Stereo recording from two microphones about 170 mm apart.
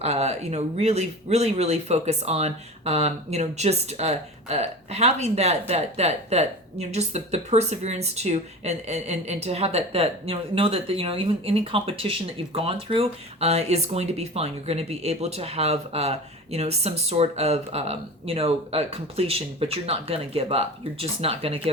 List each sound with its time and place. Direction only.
0.0 s speech: 40° right (ahead or behind)